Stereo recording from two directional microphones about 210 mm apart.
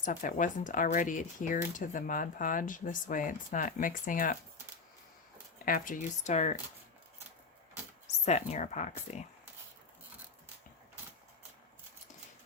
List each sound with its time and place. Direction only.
0.0 s speech: 40° left (ahead or behind)
5.6 s speech: 40° left (ahead or behind)
8.0 s speech: 30° left (ahead or behind)